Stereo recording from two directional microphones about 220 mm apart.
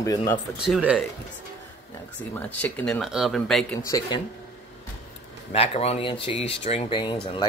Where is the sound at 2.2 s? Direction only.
10° left (ahead or behind).